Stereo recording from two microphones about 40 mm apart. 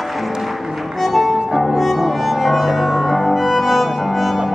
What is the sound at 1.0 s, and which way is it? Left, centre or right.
Music, centre.